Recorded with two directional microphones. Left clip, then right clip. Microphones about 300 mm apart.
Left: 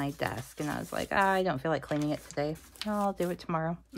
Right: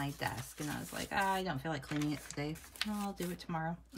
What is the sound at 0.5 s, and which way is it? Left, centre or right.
Speech, centre.